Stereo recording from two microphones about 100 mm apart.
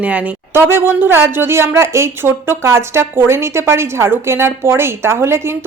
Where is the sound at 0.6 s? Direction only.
25° right (ahead or behind).